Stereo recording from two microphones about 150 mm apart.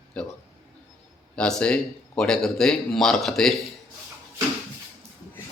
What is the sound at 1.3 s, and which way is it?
Speech, 5° left (ahead or behind).